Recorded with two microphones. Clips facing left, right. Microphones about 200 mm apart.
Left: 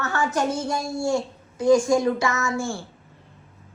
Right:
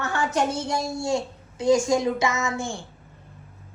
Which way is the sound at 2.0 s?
20° right (ahead or behind).